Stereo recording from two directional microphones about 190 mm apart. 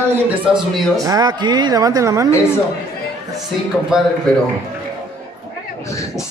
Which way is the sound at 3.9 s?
5° right (ahead or behind).